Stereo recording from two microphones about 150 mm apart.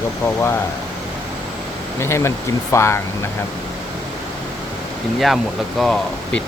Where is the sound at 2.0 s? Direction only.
20° left (ahead or behind).